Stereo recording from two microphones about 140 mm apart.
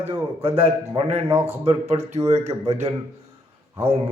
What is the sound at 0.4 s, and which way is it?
Speech, 45° right (ahead or behind).